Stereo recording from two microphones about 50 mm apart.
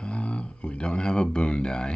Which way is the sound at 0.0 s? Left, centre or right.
Left.